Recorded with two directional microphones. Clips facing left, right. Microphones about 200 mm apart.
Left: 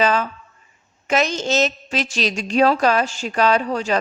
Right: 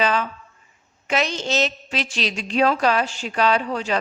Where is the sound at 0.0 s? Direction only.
45° left (ahead or behind).